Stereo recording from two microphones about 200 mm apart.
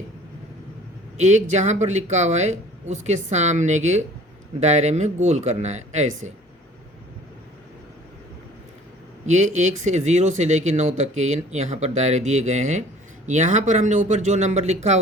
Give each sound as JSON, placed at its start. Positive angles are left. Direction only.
{"t": 1.2, "sound": "speech", "side_deg": -35}
{"t": 9.2, "sound": "speech", "side_deg": -35}